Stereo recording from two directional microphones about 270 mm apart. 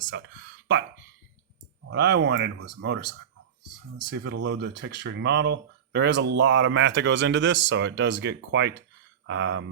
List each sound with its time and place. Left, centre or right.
0.1 s speech: right
1.9 s speech: right